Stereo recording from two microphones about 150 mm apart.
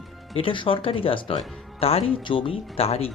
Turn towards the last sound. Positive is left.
turn(degrees=40)  # may be behind; listen again after turning